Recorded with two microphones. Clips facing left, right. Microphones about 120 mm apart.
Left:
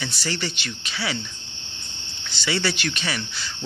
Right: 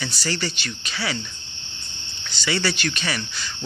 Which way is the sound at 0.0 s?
20° left (ahead or behind).